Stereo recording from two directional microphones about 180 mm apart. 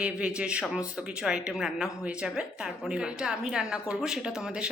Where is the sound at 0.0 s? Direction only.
5° right (ahead or behind).